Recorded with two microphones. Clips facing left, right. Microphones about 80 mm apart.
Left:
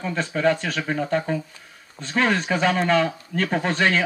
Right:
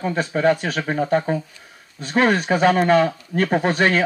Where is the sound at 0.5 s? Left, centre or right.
Centre.